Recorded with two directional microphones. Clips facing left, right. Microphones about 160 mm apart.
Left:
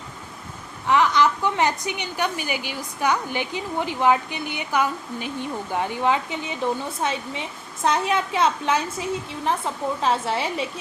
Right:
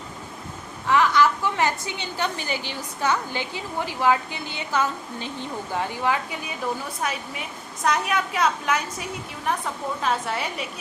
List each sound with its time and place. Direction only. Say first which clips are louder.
0.9 s a woman's voice: even; 20° left (ahead or behind)